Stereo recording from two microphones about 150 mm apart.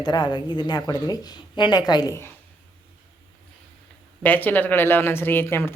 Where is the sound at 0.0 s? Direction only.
30° left (ahead or behind).